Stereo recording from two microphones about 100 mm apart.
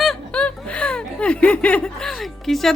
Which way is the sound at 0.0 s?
5° left (ahead or behind).